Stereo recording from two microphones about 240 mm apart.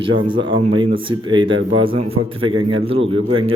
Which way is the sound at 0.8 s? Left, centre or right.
Right.